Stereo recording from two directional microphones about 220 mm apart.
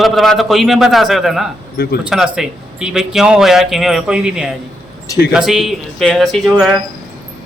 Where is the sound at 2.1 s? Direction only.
5° right (ahead or behind).